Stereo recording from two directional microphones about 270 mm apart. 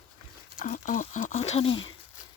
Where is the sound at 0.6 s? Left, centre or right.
Left.